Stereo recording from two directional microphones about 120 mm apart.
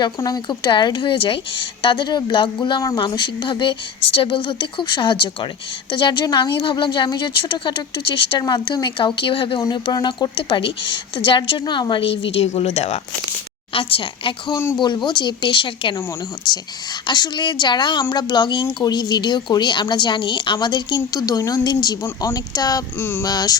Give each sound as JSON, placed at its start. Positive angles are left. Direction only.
{"t": 0.2, "sound": "a woman's voice", "side_deg": 35}
{"t": 9.6, "sound": "a woman's voice", "side_deg": 30}
{"t": 13.7, "sound": "a woman's voice", "side_deg": 45}
{"t": 14.5, "sound": "speech", "side_deg": 20}
{"t": 14.8, "sound": "speech", "side_deg": 35}
{"t": 23.0, "sound": "a sound", "side_deg": 20}
{"t": 23.2, "sound": "speech", "side_deg": 35}